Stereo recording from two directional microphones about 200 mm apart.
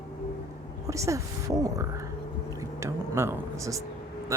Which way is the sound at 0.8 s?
15° right (ahead or behind).